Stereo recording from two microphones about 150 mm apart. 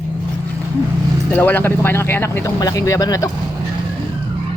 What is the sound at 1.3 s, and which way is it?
Speech, 15° left (ahead or behind).